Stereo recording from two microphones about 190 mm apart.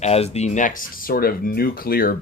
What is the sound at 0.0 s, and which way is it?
Speech, 35° left (ahead or behind).